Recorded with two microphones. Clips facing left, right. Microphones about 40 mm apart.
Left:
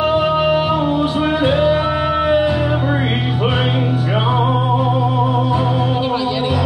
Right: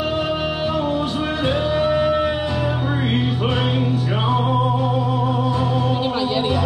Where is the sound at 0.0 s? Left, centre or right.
Centre.